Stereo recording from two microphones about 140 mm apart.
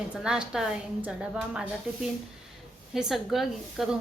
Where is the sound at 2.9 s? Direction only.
Centre (ahead or behind).